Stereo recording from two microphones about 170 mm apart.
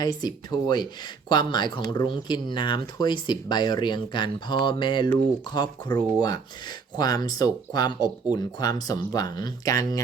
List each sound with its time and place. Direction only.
0.0 s speech: 25° left (ahead or behind)